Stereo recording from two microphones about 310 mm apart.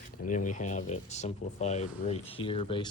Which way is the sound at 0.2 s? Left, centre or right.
Left.